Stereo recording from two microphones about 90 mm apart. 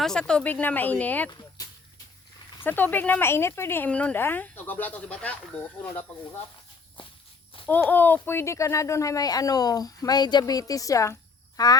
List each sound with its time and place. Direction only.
0.0 s speech: 5° left (ahead or behind)
2.6 s speech: 20° left (ahead or behind)
3.8 s speech: 15° left (ahead or behind)
7.7 s speech: 20° left (ahead or behind); by 11.8 s 45° left (ahead or behind)